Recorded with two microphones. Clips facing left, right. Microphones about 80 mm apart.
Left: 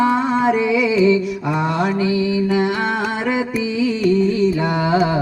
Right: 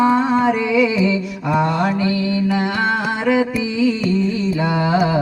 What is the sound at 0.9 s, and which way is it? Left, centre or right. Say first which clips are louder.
Mantra: left 4 dB; centre.